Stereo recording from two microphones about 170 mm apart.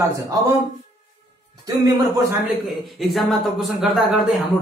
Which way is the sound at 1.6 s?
20° right (ahead or behind).